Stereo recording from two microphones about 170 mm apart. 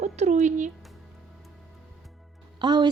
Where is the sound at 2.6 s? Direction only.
25° right (ahead or behind).